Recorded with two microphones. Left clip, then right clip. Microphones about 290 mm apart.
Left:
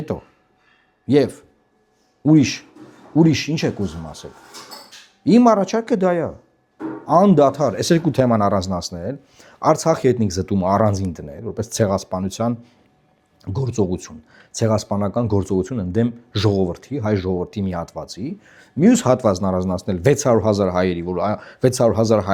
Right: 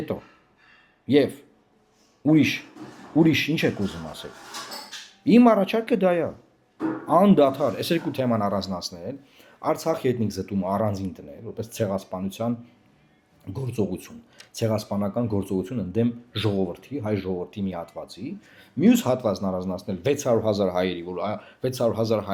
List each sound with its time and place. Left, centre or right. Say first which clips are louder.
0.1 s speech: left 4 dB; left
14.5 s speech: left 6 dB; left